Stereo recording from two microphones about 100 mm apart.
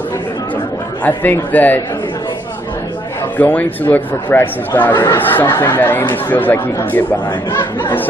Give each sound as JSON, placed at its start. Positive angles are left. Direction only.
{"t": 1.0, "sound": "speech", "side_deg": 20}
{"t": 3.3, "sound": "speech", "side_deg": 15}